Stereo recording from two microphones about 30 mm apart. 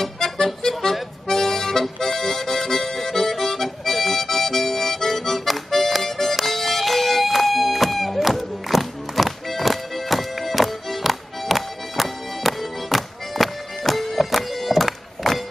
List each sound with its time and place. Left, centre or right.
0.0 s music: centre